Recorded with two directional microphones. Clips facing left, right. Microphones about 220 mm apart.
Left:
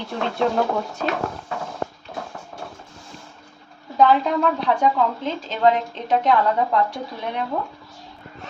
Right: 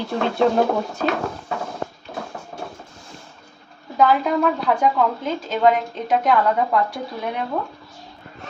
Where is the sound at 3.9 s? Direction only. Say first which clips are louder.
Even; 10° right (ahead or behind).